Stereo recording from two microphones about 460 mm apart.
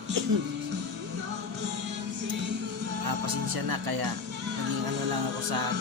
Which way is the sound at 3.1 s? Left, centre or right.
Right.